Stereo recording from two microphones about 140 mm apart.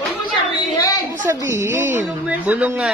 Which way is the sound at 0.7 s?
25° left (ahead or behind).